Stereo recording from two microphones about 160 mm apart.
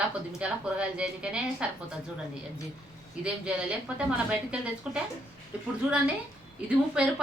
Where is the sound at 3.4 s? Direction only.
5° right (ahead or behind).